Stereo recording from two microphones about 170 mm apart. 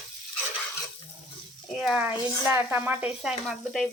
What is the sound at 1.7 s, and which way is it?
Speech, 5° right (ahead or behind).